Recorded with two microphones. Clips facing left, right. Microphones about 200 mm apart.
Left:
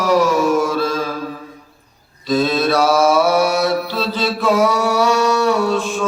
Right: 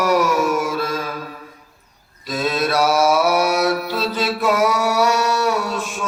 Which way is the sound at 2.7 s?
30° left (ahead or behind).